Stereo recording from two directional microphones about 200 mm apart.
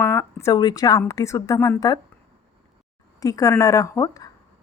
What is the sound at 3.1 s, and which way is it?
Speech, 15° left (ahead or behind).